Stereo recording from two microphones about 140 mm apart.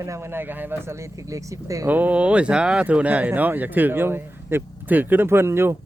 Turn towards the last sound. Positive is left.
turn(degrees=-15)  # may be behind; listen again after turning